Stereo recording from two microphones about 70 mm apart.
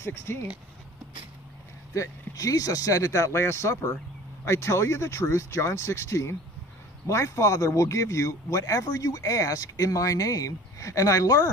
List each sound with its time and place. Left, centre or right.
0.0 s speech: left
2.0 s speech: left